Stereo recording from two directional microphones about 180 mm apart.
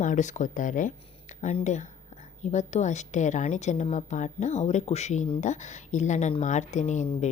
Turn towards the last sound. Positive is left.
turn(degrees=40)  # may be behind; listen again after turning